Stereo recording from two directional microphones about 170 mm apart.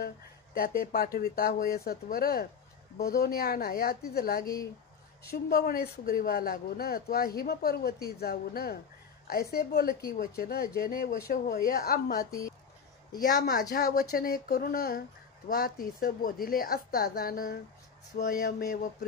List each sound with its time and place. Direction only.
0.6 s speech: 60° left (ahead or behind)
13.6 s speech: 60° left (ahead or behind)
18.2 s a sound: 70° left (ahead or behind)